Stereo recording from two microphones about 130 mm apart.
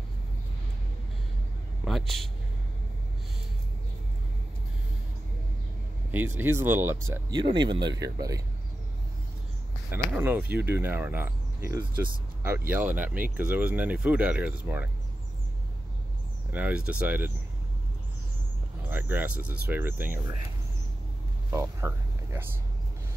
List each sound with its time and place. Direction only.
1.9 s speech: centre (ahead or behind)
6.1 s speech: 15° right (ahead or behind)
7.2 s speech: 35° right (ahead or behind)
10.1 s speech: 15° right (ahead or behind)
16.5 s speech: 10° right (ahead or behind)
18.8 s speech: 15° right (ahead or behind)
21.5 s a sound: 20° right (ahead or behind)